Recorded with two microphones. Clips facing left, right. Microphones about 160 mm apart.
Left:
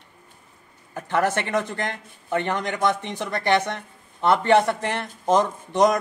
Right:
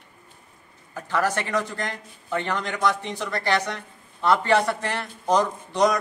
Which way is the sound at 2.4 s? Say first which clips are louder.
Left 1 dB; 20° left (ahead or behind).